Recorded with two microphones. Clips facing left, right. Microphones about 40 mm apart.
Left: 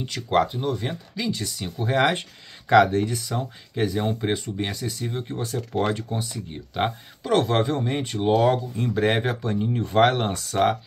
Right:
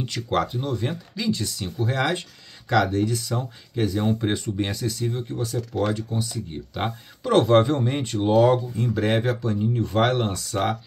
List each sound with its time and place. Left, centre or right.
0.0 s speech: centre
5.1 s speech: left
6.1 s speech: centre
7.2 s speech: centre
8.9 s speech: centre